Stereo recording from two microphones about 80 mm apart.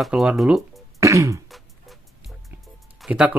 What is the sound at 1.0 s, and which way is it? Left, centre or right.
Throat clearing, right.